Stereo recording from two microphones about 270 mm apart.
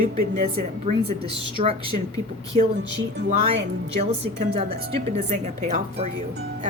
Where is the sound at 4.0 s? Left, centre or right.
Right.